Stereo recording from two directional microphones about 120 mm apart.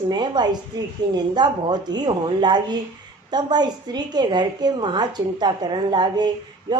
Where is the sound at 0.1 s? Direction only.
35° right (ahead or behind).